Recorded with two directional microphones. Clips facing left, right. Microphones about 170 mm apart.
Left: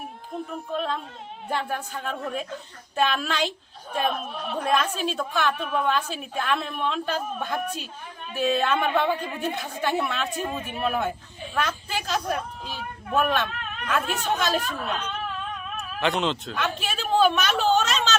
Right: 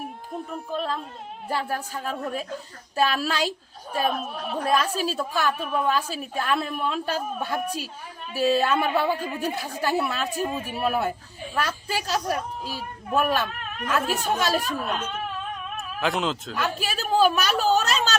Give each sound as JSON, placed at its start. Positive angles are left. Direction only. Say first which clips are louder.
{"t": 0.5, "sound": "a woman's voice", "louder": "even", "side_deg": 0}
{"t": 15.8, "sound": "a woman's voice", "louder": "left 1 dB", "side_deg": 0}